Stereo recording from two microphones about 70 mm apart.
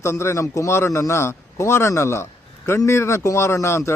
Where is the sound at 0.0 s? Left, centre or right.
Left.